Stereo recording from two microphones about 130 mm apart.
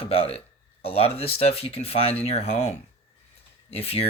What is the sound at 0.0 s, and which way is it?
Speech, 45° left (ahead or behind).